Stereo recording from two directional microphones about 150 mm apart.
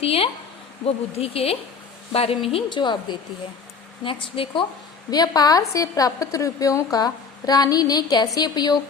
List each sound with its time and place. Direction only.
0.0 s a woman's voice: 40° left (ahead or behind)